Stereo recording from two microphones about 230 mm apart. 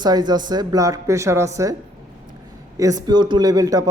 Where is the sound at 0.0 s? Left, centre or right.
Centre.